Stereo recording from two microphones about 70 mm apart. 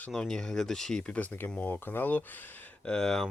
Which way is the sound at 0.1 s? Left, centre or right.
Centre.